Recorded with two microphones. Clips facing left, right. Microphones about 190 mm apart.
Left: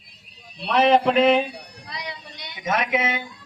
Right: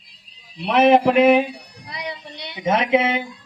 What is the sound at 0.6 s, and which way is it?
A woman's voice, 20° right (ahead or behind).